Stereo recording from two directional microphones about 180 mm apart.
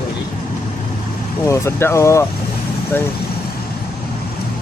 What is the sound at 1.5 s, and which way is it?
Speech, 15° left (ahead or behind).